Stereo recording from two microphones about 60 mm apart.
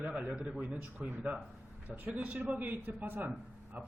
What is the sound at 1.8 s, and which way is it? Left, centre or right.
Speech, right.